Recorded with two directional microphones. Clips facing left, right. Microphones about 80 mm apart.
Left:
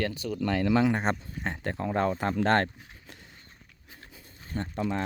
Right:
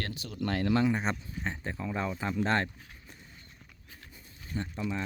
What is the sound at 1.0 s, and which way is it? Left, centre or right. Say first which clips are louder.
Speech: left 4 dB; left.